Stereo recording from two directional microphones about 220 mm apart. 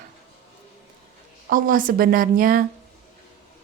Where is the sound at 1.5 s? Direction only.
40° right (ahead or behind).